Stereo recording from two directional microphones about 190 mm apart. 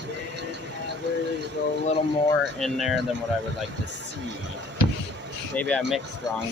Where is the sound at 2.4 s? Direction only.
Centre (ahead or behind).